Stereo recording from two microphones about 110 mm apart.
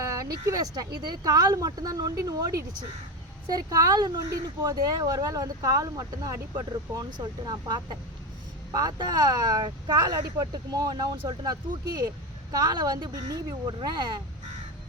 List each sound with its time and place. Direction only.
0.0 s speech: 30° right (ahead or behind)